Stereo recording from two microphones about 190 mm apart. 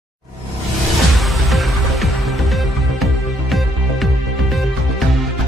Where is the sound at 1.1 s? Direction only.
Centre (ahead or behind).